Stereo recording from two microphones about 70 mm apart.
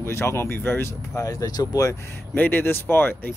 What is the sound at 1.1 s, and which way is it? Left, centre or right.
Speech, left.